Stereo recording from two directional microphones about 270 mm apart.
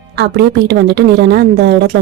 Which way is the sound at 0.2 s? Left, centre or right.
Right.